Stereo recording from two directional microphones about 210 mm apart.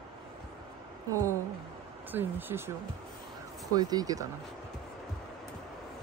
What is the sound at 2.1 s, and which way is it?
Speech, 10° right (ahead or behind).